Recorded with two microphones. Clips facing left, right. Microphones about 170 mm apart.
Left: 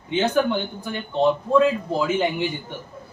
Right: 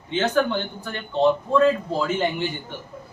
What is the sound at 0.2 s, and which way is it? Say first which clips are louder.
Speech: left 1 dB; 10° left (ahead or behind).